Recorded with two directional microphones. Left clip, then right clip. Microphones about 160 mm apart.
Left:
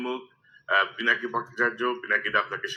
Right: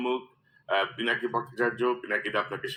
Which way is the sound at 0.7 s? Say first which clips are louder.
Left 4 dB; 10° right (ahead or behind).